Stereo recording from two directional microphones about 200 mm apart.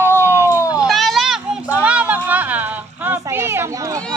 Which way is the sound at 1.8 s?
5° right (ahead or behind).